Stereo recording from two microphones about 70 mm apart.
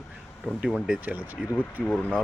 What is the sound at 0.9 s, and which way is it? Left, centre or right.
Speech, centre.